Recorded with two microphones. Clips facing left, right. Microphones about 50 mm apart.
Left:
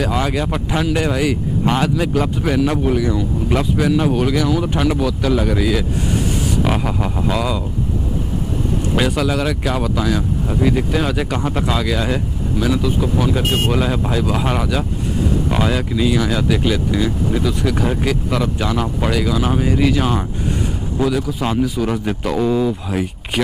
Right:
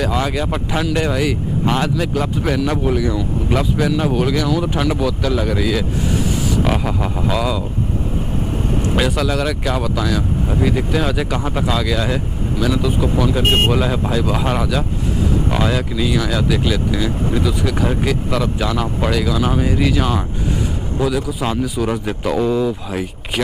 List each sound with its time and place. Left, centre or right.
0.0 s speech: centre
8.9 s speech: centre
13.4 s speech: right
13.7 s speech: centre